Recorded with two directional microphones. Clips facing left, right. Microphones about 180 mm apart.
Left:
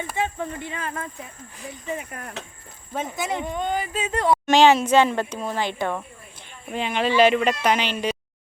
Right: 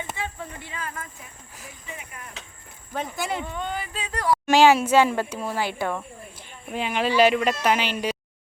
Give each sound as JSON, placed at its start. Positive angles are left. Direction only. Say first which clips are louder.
{"t": 0.6, "sound": "speech", "louder": "left 4 dB", "side_deg": 25}
{"t": 1.9, "sound": "speech", "louder": "left 9 dB", "side_deg": 50}
{"t": 2.9, "sound": "speech", "louder": "left 1 dB", "side_deg": 0}
{"t": 3.2, "sound": "speech", "louder": "left 3 dB", "side_deg": 15}
{"t": 4.4, "sound": "speech", "louder": "even", "side_deg": -10}